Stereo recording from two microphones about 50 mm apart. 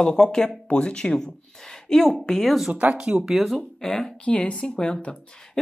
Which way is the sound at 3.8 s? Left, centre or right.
Centre.